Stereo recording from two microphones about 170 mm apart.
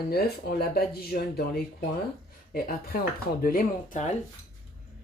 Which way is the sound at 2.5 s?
60° left (ahead or behind).